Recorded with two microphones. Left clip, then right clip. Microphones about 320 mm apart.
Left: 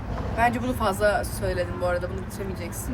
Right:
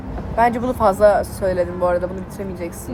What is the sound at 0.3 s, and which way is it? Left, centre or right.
Speech, right.